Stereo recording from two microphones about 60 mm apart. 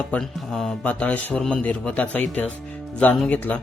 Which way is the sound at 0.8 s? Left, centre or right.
Left.